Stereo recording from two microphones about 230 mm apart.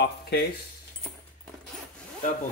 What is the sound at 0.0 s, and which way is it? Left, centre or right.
Speech, left.